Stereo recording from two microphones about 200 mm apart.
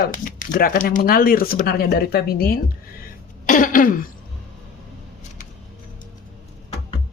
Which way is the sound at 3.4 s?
45° left (ahead or behind).